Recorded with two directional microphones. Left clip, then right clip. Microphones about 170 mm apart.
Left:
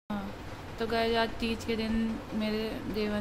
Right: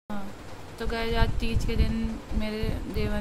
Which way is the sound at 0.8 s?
Centre (ahead or behind).